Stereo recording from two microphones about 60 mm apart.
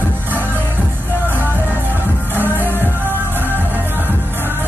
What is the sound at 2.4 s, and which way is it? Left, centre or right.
Music, right.